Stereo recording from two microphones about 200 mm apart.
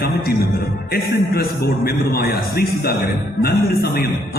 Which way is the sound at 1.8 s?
50° left (ahead or behind).